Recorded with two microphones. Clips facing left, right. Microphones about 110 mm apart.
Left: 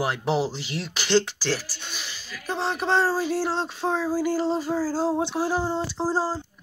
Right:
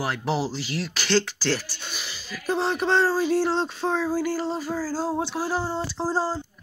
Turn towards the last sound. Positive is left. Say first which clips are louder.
# even
turn(degrees=10)  # may be behind; listen again after turning